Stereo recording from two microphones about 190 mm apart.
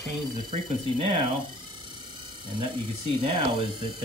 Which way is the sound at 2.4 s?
25° right (ahead or behind).